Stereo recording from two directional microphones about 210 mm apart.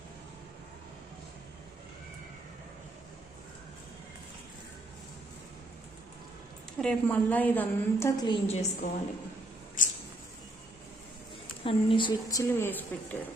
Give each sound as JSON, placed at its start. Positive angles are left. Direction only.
{"t": 6.8, "sound": "a woman's voice", "side_deg": 5}
{"t": 9.8, "sound": "a sound", "side_deg": 40}
{"t": 11.6, "sound": "a woman's voice", "side_deg": 25}